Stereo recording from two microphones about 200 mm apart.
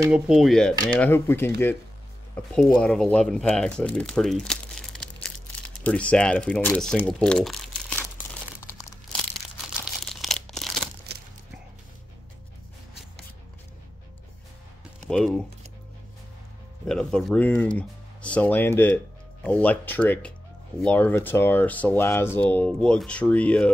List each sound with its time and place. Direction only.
0.1 s speech: centre (ahead or behind)
2.5 s speech: 5° left (ahead or behind)
8.6 s crumpling: 15° left (ahead or behind)
9.8 s crumpling: centre (ahead or behind)
10.5 s tearing: centre (ahead or behind)
11.1 s a sound: 55° right (ahead or behind)
15.0 s speech: 5° left (ahead or behind)
16.8 s speech: 5° left (ahead or behind)